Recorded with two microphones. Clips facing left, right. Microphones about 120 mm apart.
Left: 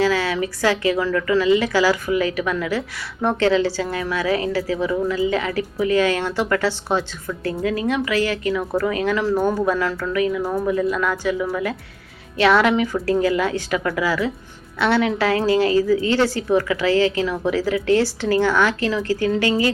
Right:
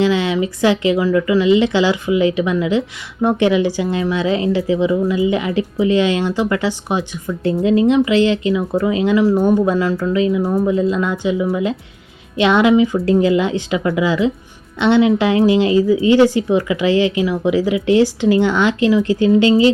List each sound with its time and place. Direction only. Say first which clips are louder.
0.0 s speech: right 4 dB; 20° right (ahead or behind)